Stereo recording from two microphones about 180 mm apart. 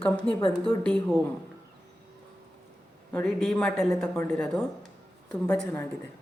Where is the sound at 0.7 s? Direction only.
5° left (ahead or behind).